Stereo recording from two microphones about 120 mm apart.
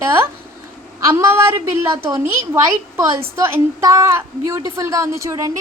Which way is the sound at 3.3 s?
25° right (ahead or behind).